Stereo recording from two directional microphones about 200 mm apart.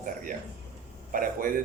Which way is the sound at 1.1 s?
45° right (ahead or behind).